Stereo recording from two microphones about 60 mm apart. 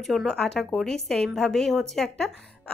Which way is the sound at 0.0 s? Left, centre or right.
Centre.